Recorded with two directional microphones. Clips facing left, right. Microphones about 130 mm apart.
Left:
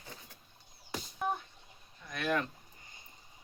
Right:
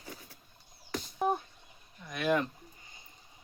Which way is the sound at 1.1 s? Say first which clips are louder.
Right 5 dB; 40° right (ahead or behind).